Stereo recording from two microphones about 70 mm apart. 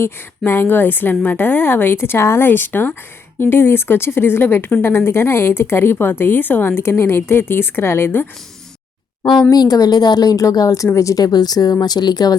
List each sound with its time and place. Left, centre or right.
0.0 s a woman's voice: left
9.5 s a woman's voice: left